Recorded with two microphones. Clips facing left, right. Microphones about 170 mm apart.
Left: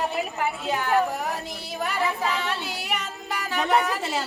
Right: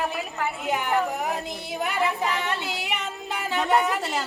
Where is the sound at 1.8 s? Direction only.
20° right (ahead or behind).